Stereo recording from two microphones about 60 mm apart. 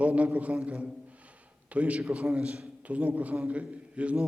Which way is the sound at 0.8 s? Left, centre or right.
Right.